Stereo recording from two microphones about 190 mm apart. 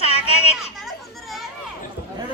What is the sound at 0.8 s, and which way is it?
Children playing, centre (ahead or behind).